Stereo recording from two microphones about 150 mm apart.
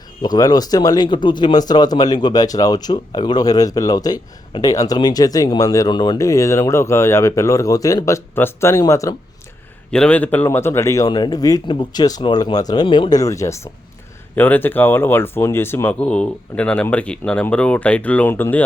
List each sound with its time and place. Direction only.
0.2 s speech: 25° left (ahead or behind)
9.9 s speech: 5° left (ahead or behind)